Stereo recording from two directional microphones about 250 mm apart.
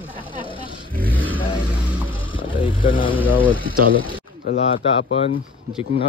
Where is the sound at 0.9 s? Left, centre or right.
Centre.